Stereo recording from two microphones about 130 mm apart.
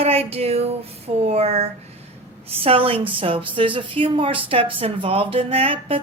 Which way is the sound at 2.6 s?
45° right (ahead or behind).